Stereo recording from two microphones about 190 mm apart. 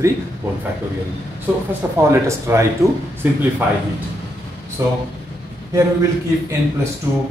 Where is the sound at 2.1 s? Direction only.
15° right (ahead or behind).